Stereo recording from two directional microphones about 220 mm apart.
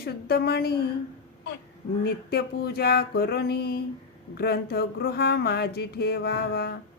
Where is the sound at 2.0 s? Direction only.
45° left (ahead or behind).